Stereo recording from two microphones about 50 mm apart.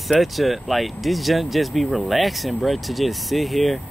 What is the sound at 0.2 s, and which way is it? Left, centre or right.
Speech, centre.